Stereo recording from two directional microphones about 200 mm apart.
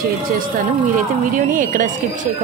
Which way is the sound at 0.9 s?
40° right (ahead or behind).